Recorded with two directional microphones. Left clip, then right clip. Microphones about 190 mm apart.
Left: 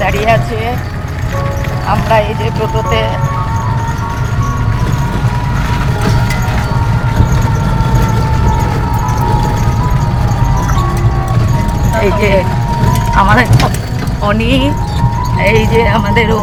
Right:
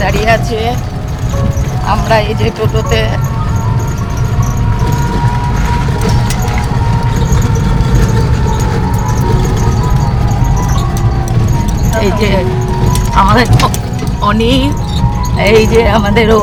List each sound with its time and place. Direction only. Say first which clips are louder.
0.0 s speech: even; 15° right (ahead or behind)
1.9 s speech: even; 30° right (ahead or behind)
11.9 s speech: left 2 dB; 20° right (ahead or behind)
15.4 s speech: right 3 dB; 30° right (ahead or behind)